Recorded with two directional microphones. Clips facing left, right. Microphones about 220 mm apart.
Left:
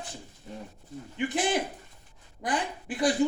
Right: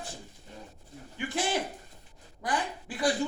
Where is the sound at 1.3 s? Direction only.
20° left (ahead or behind).